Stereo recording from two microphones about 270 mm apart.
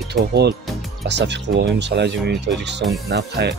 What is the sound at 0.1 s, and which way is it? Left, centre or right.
Speech, right.